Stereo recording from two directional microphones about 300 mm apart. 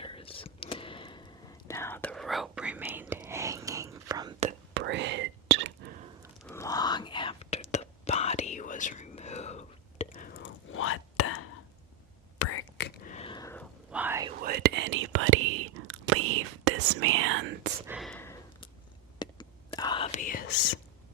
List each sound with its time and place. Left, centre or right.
0.0 s whispering: centre
4.7 s whispering: right
6.4 s whispering: centre
13.9 s whispering: centre
14.3 s whispering: right
17.8 s sniff: centre
19.2 s whispering: centre